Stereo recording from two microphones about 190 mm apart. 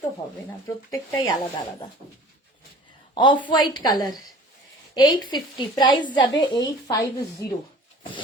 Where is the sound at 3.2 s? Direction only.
25° left (ahead or behind).